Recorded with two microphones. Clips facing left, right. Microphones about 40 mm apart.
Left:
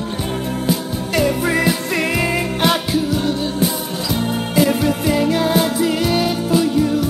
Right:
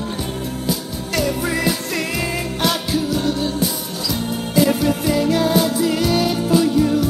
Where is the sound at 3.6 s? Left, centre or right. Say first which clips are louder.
Left 3 dB; left.